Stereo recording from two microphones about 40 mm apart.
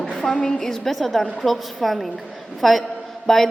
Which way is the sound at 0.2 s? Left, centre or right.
Centre.